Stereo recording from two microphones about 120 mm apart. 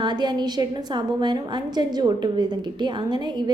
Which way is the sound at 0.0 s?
40° right (ahead or behind).